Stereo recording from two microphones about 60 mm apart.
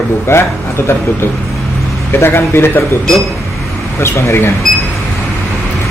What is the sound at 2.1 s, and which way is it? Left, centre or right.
Speech, left.